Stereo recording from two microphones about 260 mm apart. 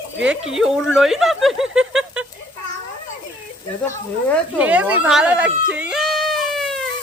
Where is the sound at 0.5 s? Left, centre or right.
Centre.